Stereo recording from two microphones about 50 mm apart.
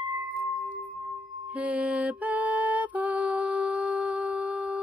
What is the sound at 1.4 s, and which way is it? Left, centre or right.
Music, right.